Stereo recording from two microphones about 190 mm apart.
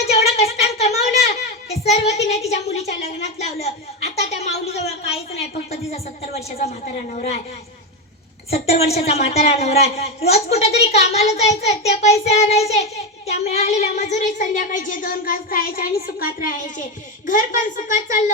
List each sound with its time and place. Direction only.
0.1 s a sound: 35° left (ahead or behind)
1.7 s child singing: 35° left (ahead or behind)
2.5 s a woman's voice: 35° left (ahead or behind)
8.4 s a woman's voice: 35° left (ahead or behind)